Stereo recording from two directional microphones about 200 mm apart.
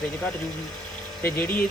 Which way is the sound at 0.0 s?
5° left (ahead or behind).